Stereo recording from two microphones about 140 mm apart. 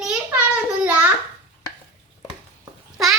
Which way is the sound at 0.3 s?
10° right (ahead or behind).